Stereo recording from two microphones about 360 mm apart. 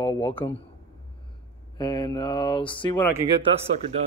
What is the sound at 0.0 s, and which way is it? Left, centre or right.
Speech, centre.